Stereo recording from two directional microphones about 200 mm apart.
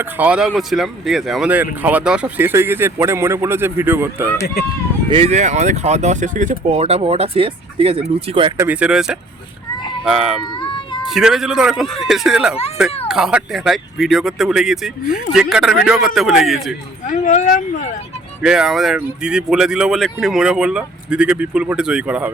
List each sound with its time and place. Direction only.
0.0 s speech: 5° right (ahead or behind)
5.1 s speech: 30° right (ahead or behind)
8.5 s speech: 10° right (ahead or behind)
17.1 s speech: 35° left (ahead or behind)
18.4 s speech: 5° right (ahead or behind)